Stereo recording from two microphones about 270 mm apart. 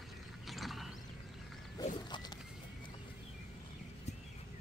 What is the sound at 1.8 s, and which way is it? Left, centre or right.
Wild animals, centre.